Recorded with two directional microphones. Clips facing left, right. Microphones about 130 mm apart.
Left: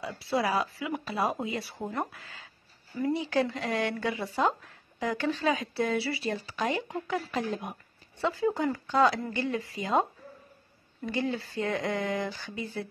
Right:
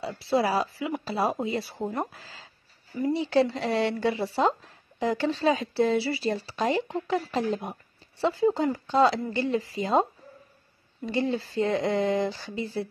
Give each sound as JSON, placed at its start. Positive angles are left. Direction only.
{"t": 0.0, "sound": "speech", "side_deg": -30}
{"t": 1.8, "sound": "a woman's voice", "side_deg": -20}
{"t": 11.1, "sound": "a woman's voice", "side_deg": -25}